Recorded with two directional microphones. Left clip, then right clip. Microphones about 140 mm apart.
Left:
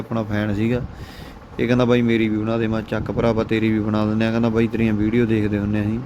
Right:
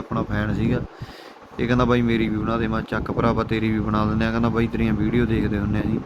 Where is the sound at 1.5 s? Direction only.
40° left (ahead or behind).